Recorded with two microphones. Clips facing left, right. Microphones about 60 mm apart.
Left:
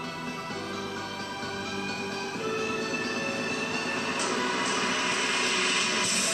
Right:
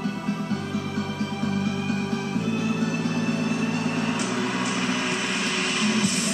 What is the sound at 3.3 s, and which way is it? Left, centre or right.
Music, right.